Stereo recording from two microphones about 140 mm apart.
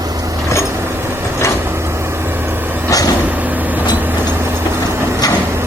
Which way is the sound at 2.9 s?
25° left (ahead or behind).